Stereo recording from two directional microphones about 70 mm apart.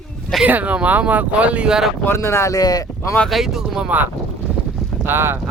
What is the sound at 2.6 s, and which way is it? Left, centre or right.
Speech, left.